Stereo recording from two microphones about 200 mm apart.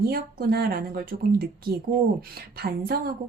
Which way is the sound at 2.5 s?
50° right (ahead or behind).